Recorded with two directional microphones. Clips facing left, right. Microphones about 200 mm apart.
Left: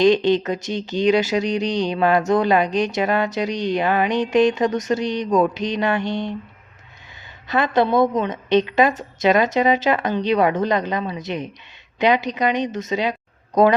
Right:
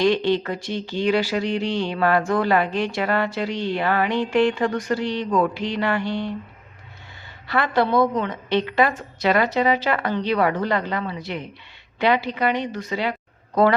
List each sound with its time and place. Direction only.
0.0 s speech: 20° left (ahead or behind)
7.4 s speech: 20° left (ahead or behind)